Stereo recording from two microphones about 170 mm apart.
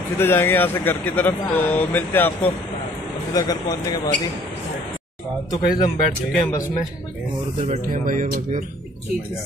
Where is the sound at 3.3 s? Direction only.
20° left (ahead or behind).